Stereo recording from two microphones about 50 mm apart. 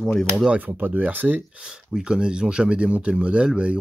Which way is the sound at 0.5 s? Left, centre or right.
Right.